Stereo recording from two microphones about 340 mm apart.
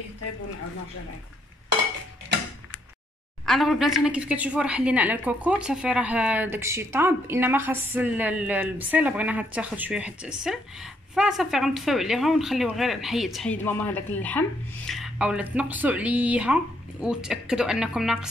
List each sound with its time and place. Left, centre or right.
3.4 s a woman's voice: centre